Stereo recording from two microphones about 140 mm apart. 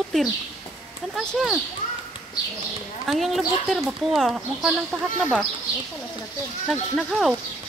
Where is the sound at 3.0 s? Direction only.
Centre (ahead or behind).